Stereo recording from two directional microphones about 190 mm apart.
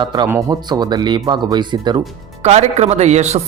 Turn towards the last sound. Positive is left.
turn(degrees=-35)  # may be behind; listen again after turning